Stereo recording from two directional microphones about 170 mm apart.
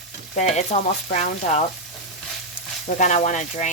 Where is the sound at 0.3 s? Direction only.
40° left (ahead or behind).